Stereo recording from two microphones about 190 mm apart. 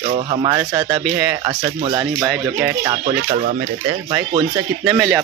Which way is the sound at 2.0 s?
10° right (ahead or behind).